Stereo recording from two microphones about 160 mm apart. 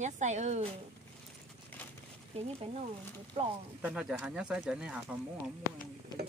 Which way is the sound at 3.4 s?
35° right (ahead or behind).